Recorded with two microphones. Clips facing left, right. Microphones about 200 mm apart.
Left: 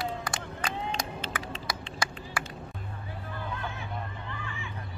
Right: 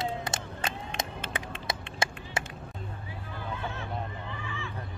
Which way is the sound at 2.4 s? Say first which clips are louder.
Right 2 dB; 20° right (ahead or behind).